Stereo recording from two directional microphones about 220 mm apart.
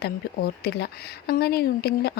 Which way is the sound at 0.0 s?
45° left (ahead or behind).